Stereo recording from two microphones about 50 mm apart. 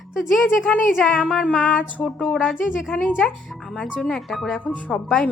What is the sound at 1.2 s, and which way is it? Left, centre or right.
Speech, left.